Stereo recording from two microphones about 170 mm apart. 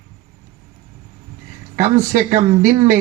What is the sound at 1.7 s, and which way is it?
A man's voice, 45° right (ahead or behind).